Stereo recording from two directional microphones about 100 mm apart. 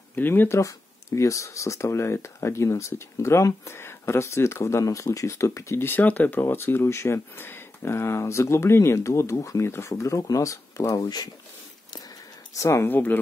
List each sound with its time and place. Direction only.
0.1 s speech: 20° left (ahead or behind)
0.6 s speech: 30° left (ahead or behind)
12.5 s speech: 30° left (ahead or behind)